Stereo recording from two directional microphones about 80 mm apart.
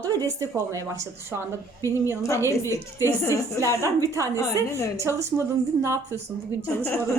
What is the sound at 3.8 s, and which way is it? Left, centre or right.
Speech, right.